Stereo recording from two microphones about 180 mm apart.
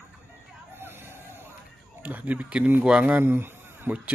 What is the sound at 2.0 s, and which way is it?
A man's voice, 10° right (ahead or behind).